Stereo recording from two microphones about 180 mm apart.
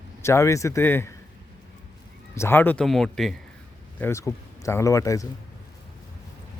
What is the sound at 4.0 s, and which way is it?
Speech, 15° left (ahead or behind).